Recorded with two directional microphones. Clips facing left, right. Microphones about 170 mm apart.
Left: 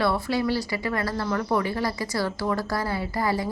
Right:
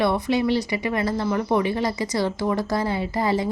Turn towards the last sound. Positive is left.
turn(degrees=-20)  # may be behind; listen again after turning